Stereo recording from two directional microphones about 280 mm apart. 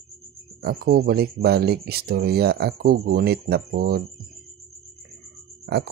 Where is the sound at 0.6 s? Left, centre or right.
Right.